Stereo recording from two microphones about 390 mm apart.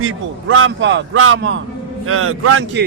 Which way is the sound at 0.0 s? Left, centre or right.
Right.